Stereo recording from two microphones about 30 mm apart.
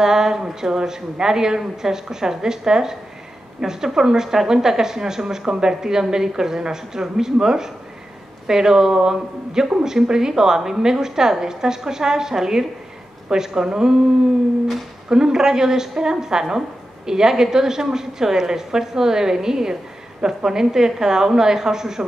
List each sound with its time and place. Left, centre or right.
0.0 s a woman's voice: centre
15.0 s a woman's voice: right